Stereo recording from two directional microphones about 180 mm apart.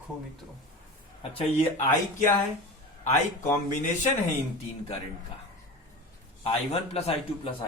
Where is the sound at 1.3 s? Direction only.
30° left (ahead or behind).